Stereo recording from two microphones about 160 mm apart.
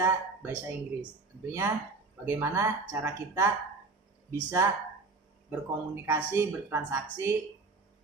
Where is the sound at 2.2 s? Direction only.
15° right (ahead or behind).